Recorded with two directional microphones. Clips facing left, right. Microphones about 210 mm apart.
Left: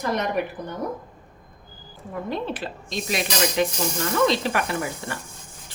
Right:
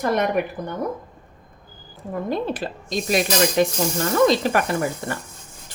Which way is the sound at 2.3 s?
40° right (ahead or behind).